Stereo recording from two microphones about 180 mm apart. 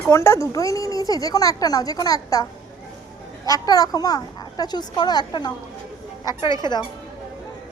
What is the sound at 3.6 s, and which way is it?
Speech, 20° left (ahead or behind).